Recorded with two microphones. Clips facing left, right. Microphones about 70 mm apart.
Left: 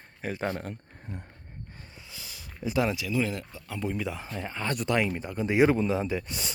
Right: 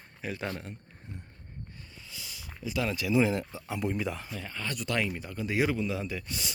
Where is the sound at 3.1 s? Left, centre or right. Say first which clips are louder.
Right 3 dB; centre.